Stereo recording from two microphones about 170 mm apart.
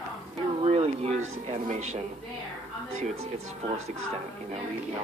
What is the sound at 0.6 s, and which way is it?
Speech, 35° right (ahead or behind).